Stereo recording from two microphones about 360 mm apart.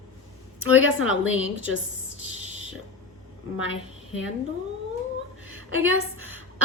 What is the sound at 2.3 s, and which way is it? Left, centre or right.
Whispering, left.